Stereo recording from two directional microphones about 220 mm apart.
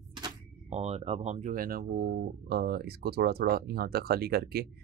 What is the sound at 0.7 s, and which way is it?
Speech, 30° right (ahead or behind).